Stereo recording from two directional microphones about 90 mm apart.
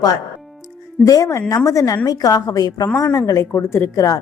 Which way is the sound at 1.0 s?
40° left (ahead or behind).